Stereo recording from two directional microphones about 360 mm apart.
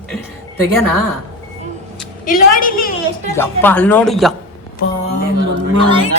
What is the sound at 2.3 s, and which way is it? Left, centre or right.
Speech, left.